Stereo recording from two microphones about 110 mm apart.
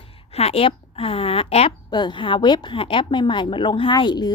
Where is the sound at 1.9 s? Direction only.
45° left (ahead or behind).